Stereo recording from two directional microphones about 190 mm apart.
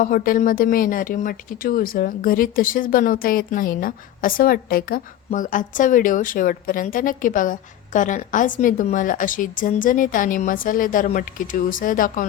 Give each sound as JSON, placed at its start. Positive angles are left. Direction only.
{"t": 0.0, "sound": "speech", "side_deg": 45}